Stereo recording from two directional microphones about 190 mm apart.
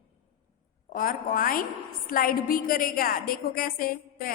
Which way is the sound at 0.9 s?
45° left (ahead or behind).